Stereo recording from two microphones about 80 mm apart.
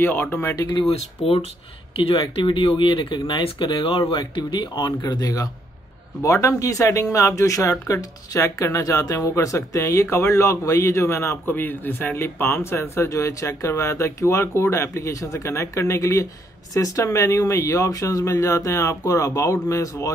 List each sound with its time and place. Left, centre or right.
0.0 s speech: left
2.1 s speech: left
4.1 s speech: left
5.0 s speech: left
11.5 s speech: left